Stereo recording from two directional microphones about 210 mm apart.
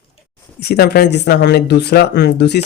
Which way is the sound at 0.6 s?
50° left (ahead or behind).